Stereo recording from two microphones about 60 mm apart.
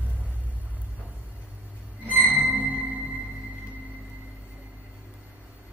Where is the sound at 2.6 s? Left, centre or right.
Right.